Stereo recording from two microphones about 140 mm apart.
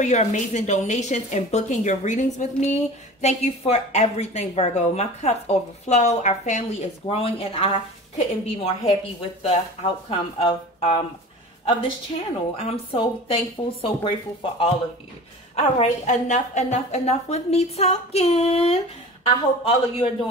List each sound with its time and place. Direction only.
0.0 s a woman's voice: 55° left (ahead or behind); by 11.0 s 40° left (ahead or behind)
12.5 s speech: 45° left (ahead or behind)
15.5 s a woman's voice: 55° left (ahead or behind); by 20.1 s 40° left (ahead or behind)